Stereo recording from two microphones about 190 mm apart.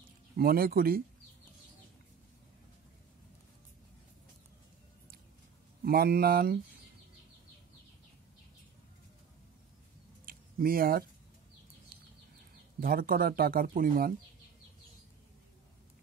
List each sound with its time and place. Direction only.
0.4 s speech: 50° right (ahead or behind)
5.9 s speech: 55° right (ahead or behind)
10.2 s a sound: 50° right (ahead or behind)
12.8 s speech: 50° right (ahead or behind)